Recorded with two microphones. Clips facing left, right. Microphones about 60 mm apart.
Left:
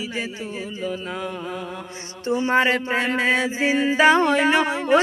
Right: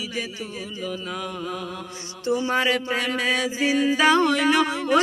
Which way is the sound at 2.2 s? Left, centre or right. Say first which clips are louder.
Left 3 dB; left.